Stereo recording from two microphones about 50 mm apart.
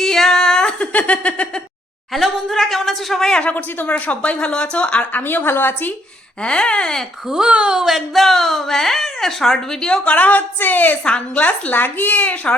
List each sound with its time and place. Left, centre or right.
0.0 s a sound: centre
0.8 s a sound: left
2.1 s a woman's voice: centre
3.5 s speech: left
5.1 s a woman's voice: left
6.4 s speech: centre
7.3 s speech: centre
7.5 s a woman's voice: right
7.8 s a woman's voice: centre
10.0 s a woman's voice: left
11.0 s speech: left
11.7 s a woman's voice: left